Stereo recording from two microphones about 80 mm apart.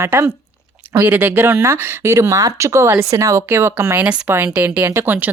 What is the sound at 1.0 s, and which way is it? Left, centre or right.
Speech, right.